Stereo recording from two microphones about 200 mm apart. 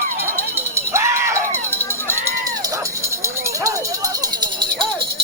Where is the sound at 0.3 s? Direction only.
10° right (ahead or behind).